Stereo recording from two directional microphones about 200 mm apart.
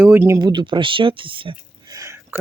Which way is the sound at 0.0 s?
10° right (ahead or behind).